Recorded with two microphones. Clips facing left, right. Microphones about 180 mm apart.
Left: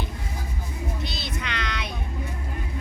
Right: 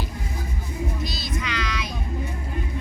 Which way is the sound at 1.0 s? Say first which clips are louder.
Right 3 dB; 65° left (ahead or behind).